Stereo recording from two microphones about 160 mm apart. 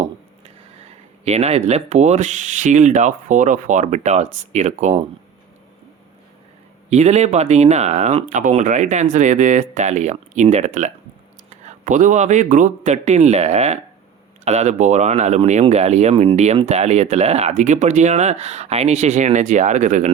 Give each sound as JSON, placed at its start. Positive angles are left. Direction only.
{"t": 0.9, "sound": "speech", "side_deg": -40}
{"t": 6.9, "sound": "speech", "side_deg": -45}